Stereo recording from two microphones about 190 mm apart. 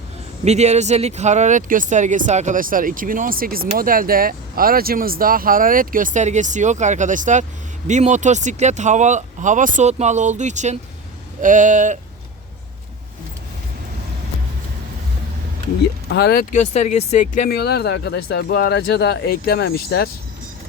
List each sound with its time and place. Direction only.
0.4 s speech: 35° right (ahead or behind)
16.0 s speech: 55° left (ahead or behind); by 17.5 s 35° left (ahead or behind)
17.5 s speech: 60° left (ahead or behind)